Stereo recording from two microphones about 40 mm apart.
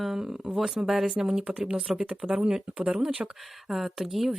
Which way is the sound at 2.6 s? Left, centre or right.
Right.